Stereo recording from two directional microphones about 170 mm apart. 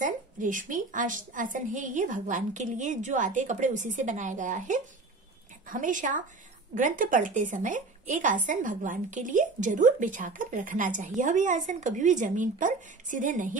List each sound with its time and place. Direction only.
0.0 s a woman's voice: 50° right (ahead or behind)